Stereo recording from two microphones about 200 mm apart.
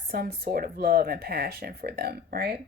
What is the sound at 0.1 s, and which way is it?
Speech, 50° right (ahead or behind).